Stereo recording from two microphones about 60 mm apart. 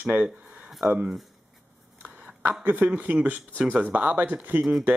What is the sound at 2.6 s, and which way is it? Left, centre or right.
Speech, right.